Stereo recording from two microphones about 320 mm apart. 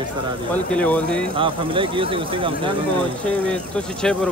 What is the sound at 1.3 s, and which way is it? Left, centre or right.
Speech, centre.